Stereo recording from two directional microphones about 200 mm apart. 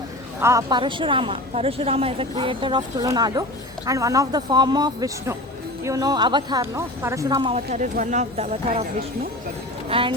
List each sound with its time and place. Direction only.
0.3 s a woman's voice: 15° right (ahead or behind)
7.5 s speech: 35° right (ahead or behind)
9.9 s a woman's voice: 25° right (ahead or behind)